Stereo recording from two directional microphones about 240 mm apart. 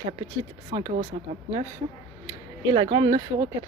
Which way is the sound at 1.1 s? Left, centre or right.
Right.